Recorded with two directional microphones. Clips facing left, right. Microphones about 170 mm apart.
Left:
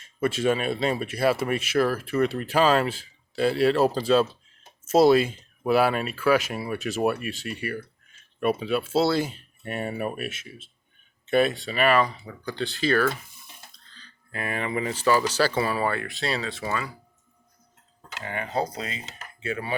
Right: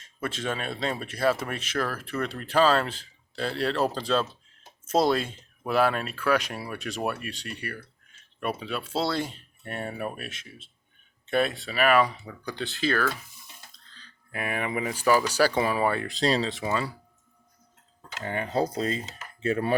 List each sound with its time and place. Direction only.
0.2 s speech: 10° left (ahead or behind)
14.3 s speech: 10° right (ahead or behind)
16.2 s speech: 35° right (ahead or behind)
16.5 s speech: 20° right (ahead or behind)
18.2 s speech: 35° right (ahead or behind)